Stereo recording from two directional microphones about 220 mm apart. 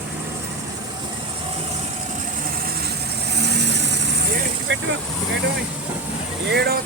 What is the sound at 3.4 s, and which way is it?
Vehicle, 50° right (ahead or behind).